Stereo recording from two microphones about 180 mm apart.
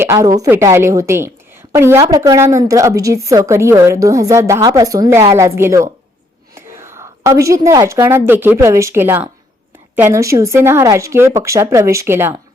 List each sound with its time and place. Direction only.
0.0 s a woman's voice: 15° right (ahead or behind)